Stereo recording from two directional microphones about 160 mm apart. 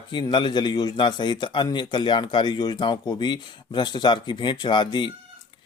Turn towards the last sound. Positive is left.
turn(degrees=30)  # may be behind; listen again after turning